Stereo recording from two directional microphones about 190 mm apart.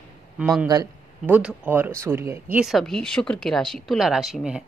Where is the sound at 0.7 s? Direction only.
20° right (ahead or behind).